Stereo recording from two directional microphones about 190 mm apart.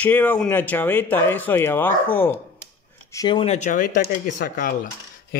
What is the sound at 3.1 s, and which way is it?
Speech, 25° left (ahead or behind).